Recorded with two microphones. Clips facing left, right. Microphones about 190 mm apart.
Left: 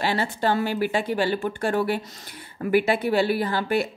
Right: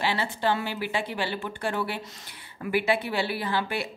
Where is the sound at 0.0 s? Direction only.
45° left (ahead or behind).